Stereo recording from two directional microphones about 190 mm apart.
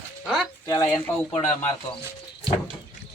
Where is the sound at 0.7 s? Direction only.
15° left (ahead or behind).